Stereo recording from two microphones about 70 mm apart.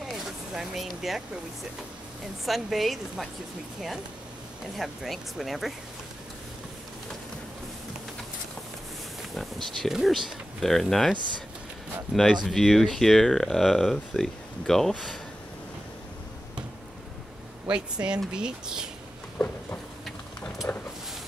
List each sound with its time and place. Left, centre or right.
0.0 s a sound: centre
0.8 s speech: centre
2.4 s speech: centre
4.7 s speech: centre
9.3 s speech: centre
18.0 s speech: right
18.3 s speech: centre
19.3 s a sound: left